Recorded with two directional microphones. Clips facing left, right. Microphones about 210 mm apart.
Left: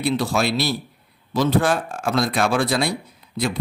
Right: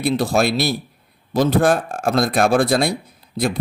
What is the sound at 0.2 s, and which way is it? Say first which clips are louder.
Speech: right 3 dB; 50° right (ahead or behind).